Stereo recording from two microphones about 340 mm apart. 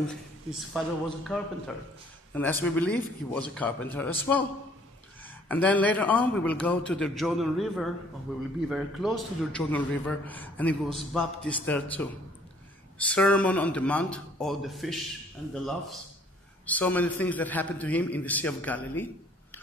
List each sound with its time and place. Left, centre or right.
0.7 s a man's voice: centre
5.2 s a man's voice: centre
13.1 s a man's voice: centre